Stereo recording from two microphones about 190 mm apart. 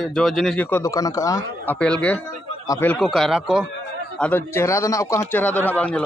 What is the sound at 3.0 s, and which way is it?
Speech, centre (ahead or behind).